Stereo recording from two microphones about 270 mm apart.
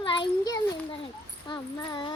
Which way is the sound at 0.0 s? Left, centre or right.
Centre.